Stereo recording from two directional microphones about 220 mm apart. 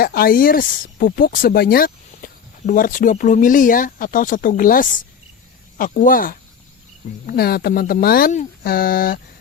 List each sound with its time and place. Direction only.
0.0 s speech: 45° left (ahead or behind)